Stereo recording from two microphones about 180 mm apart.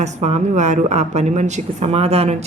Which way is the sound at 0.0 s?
40° right (ahead or behind).